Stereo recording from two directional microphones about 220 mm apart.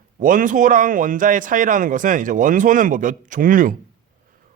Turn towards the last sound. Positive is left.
turn(degrees=-40)  # may be behind; listen again after turning